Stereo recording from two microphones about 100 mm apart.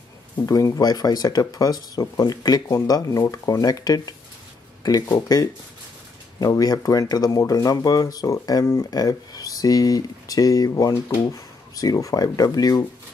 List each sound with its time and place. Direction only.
0.5 s speech: 35° left (ahead or behind)
5.1 s speech: 40° left (ahead or behind)